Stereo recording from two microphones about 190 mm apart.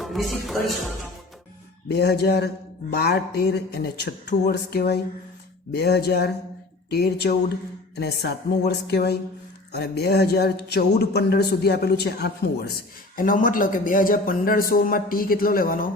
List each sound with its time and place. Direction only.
0.0 s speech: centre (ahead or behind)
2.0 s speech: 60° left (ahead or behind)
13.1 s a man's voice: 45° left (ahead or behind)